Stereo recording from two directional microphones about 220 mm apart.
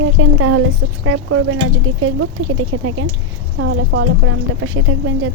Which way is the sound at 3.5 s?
60° right (ahead or behind).